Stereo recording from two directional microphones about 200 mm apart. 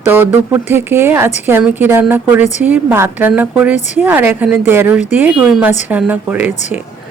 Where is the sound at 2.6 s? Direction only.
10° right (ahead or behind).